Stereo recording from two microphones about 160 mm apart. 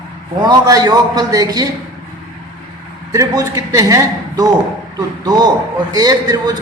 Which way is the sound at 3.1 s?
20° right (ahead or behind).